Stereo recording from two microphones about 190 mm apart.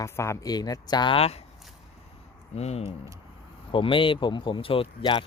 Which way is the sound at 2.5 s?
35° left (ahead or behind).